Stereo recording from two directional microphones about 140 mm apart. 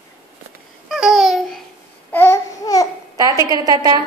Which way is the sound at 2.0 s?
15° left (ahead or behind).